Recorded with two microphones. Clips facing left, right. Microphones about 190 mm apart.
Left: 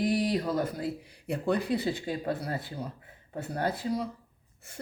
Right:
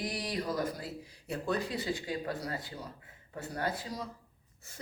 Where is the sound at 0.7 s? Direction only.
60° left (ahead or behind).